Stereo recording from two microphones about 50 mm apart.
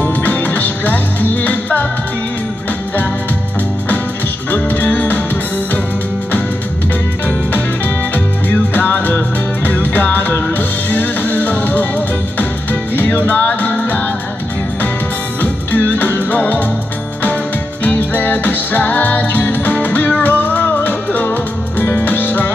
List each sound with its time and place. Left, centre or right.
0.0 s music: left
4.5 s music: left
8.5 s music: left
12.9 s music: left
15.4 s music: left
17.8 s music: left